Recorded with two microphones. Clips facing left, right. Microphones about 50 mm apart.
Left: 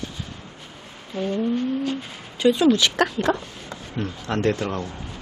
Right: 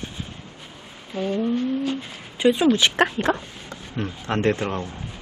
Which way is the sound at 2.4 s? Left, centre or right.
Right.